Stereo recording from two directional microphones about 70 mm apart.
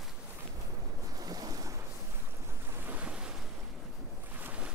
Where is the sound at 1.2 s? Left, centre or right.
Right.